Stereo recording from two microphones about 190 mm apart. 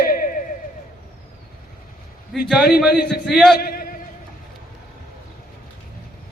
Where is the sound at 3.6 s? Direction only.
50° left (ahead or behind).